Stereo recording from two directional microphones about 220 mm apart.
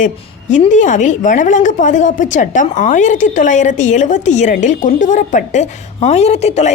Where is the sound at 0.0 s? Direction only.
35° left (ahead or behind).